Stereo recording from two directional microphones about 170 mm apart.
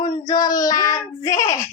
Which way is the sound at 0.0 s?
25° left (ahead or behind).